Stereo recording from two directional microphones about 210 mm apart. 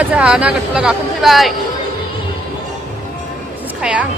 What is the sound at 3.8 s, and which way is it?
Speech, 5° right (ahead or behind).